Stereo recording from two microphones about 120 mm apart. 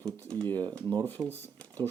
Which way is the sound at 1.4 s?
15° left (ahead or behind).